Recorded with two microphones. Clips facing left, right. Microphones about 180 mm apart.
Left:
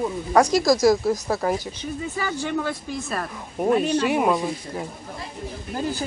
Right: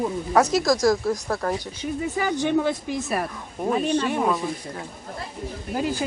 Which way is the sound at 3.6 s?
5° left (ahead or behind).